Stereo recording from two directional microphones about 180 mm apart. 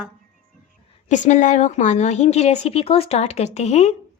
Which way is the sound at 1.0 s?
45° left (ahead or behind).